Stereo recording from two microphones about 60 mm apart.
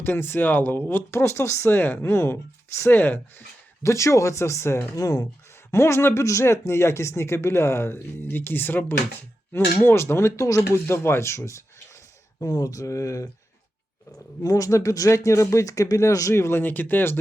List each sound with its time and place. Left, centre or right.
0.0 s speech: left
1.1 s speech: left
3.0 s speech: left
3.8 s speech: left
4.9 s speech: left
5.7 s speech: left
12.4 s speech: left
14.4 s speech: left
16.3 s speech: left